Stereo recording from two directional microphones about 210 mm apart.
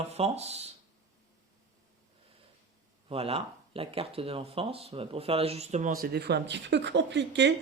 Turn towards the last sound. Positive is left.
turn(degrees=-55)  # may be behind; listen again after turning